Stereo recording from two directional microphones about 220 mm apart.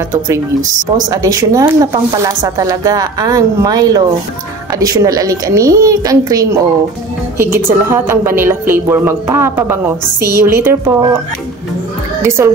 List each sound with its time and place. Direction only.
1.1 s a woman's voice: 15° right (ahead or behind)
12.2 s a child's voice: 10° right (ahead or behind)